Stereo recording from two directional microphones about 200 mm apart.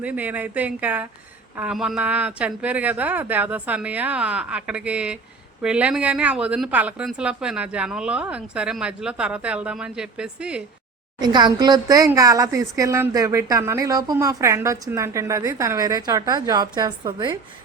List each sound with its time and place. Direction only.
0.0 s speech: 10° right (ahead or behind)
11.2 s speech: 20° right (ahead or behind)